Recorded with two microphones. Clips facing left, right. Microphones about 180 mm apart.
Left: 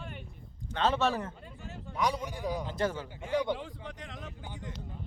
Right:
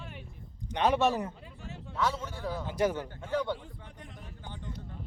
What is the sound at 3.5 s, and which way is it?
Vehicle, 90° left.